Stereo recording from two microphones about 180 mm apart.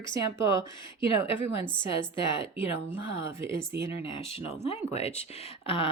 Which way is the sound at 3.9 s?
30° left (ahead or behind).